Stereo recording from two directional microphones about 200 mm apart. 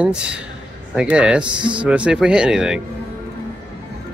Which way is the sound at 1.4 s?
25° right (ahead or behind).